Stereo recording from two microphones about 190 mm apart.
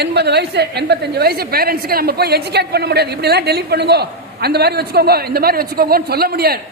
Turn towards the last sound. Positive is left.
turn(degrees=-55)  # may be behind; listen again after turning